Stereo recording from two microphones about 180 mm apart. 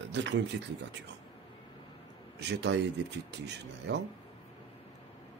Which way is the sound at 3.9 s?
80° right.